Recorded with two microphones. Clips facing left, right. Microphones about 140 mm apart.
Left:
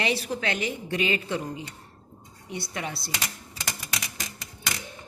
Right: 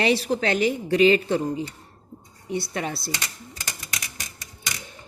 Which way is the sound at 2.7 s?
40° right (ahead or behind).